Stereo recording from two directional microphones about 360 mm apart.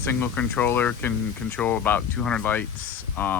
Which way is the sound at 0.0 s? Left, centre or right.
Centre.